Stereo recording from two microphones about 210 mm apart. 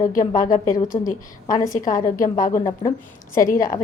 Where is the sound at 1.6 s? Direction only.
40° left (ahead or behind).